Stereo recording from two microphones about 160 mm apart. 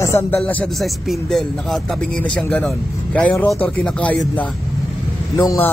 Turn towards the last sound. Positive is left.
turn(degrees=20)  # may be behind; listen again after turning